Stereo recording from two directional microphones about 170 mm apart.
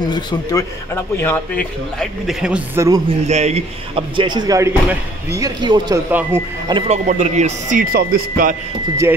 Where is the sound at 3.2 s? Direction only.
40° right (ahead or behind); by 6.0 s 25° right (ahead or behind).